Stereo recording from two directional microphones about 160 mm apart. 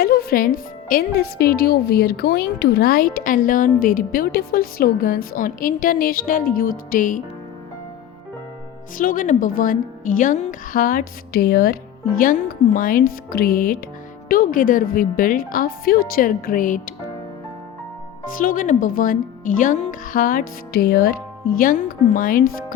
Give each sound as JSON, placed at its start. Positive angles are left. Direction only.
{"t": 0.0, "sound": "a woman's voice", "side_deg": 70}
{"t": 9.0, "sound": "a woman's voice", "side_deg": 60}
{"t": 18.3, "sound": "a woman's voice", "side_deg": 60}
{"t": 21.6, "sound": "a woman's voice", "side_deg": 60}